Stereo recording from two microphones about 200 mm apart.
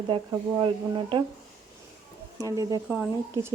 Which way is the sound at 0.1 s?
20° right (ahead or behind).